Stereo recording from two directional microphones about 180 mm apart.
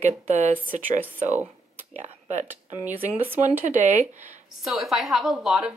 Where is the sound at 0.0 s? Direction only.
35° right (ahead or behind).